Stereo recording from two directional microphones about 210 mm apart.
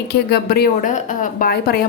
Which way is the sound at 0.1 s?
45° left (ahead or behind).